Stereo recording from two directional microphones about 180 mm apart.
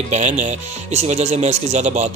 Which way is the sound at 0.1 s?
40° right (ahead or behind).